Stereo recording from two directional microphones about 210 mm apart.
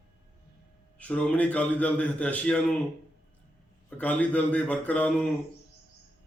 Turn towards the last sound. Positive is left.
turn(degrees=5)  # may be behind; listen again after turning